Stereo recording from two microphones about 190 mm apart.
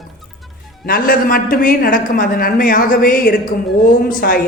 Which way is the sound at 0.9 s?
50° left (ahead or behind).